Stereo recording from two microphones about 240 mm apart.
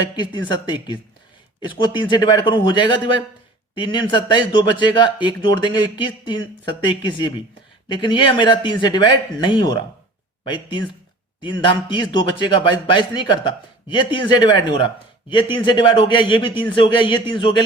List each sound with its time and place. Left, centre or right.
0.4 s speech: centre
7.9 s speech: centre